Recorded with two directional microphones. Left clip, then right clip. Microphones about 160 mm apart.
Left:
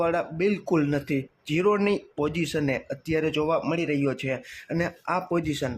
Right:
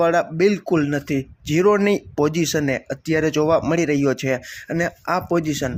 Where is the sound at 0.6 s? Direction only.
15° right (ahead or behind).